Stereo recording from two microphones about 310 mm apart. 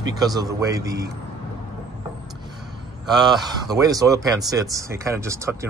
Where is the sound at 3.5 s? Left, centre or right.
Centre.